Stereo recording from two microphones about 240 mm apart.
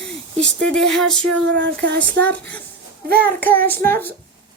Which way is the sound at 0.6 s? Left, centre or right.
Centre.